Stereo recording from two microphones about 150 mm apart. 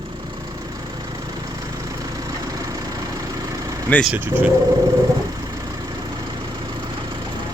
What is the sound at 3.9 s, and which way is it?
Speech, 10° left (ahead or behind).